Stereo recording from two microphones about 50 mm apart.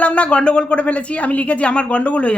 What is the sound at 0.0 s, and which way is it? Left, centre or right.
Speech, left.